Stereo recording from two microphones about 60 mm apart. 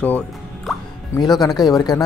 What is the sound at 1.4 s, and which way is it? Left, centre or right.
Speech, left.